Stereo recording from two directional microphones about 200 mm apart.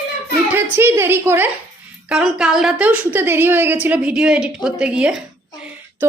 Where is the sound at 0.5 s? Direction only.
10° right (ahead or behind).